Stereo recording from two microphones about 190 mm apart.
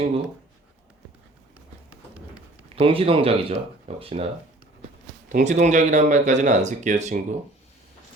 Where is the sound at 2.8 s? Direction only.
30° right (ahead or behind).